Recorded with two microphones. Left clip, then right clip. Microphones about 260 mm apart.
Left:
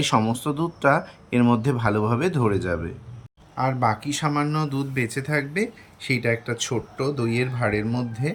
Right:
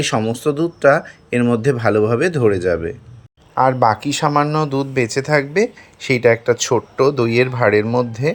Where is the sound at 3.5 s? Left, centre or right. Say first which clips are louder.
Right 9 dB; right.